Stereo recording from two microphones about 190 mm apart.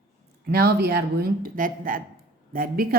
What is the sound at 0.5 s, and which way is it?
Speech, 55° right (ahead or behind).